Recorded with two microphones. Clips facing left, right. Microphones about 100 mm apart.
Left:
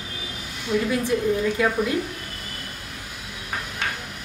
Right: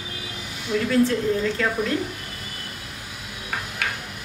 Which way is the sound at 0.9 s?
15° left (ahead or behind).